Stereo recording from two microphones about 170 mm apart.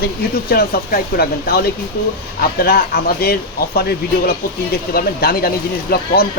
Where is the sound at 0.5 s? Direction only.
60° left (ahead or behind).